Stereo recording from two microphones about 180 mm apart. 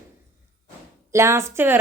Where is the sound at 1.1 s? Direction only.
15° right (ahead or behind).